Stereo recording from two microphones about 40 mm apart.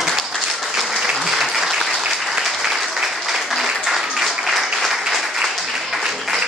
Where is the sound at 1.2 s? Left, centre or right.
Centre.